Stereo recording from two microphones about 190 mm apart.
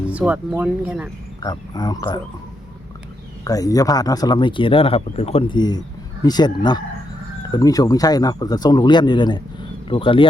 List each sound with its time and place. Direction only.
0.1 s speech: 10° right (ahead or behind)
1.4 s speech: 20° left (ahead or behind)
3.4 s speech: 20° left (ahead or behind)